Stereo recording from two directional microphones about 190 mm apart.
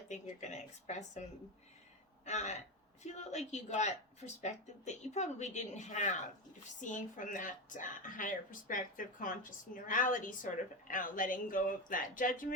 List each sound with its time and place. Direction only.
0.1 s speech: 40° left (ahead or behind)
2.2 s speech: 35° left (ahead or behind)